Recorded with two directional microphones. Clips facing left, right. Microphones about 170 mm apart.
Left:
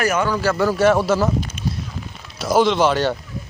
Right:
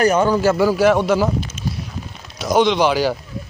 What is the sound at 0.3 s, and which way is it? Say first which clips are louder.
Speech: right 4 dB; 15° right (ahead or behind).